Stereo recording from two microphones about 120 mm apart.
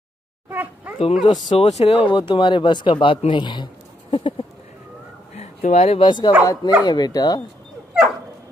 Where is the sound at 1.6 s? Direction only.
65° left (ahead or behind).